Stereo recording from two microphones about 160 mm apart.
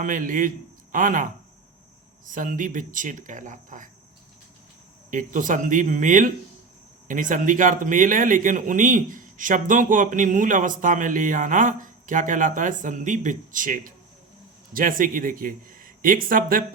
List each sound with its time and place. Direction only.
0.0 s speech: 55° right (ahead or behind)
5.1 s speech: 55° right (ahead or behind)